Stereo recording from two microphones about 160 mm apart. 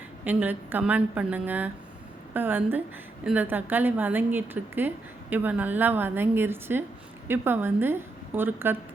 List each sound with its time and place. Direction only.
0.3 s a woman's voice: 10° right (ahead or behind)